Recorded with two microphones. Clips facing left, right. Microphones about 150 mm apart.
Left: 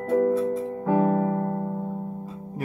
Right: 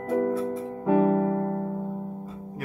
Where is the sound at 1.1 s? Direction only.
30° left (ahead or behind).